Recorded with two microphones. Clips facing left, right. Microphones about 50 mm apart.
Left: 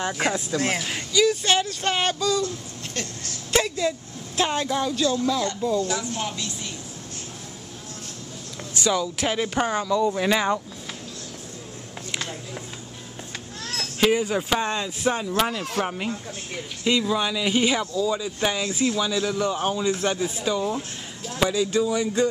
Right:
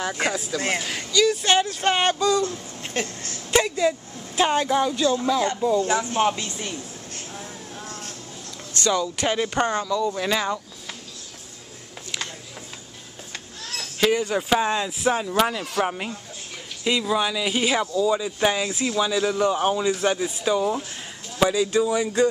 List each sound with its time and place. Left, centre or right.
0.0 s speech: centre
1.4 s speech: centre; by 3.3 s right
3.8 s speech: centre; by 6.7 s right
8.7 s speech: centre
13.7 s cat: centre
14.5 s speech: centre